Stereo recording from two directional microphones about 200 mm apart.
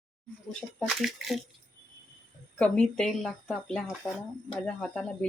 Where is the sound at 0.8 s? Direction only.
Centre (ahead or behind).